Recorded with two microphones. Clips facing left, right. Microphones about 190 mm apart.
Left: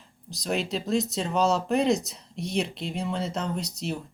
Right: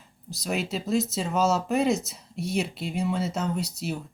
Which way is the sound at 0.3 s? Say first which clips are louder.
Left 1 dB; 5° right (ahead or behind).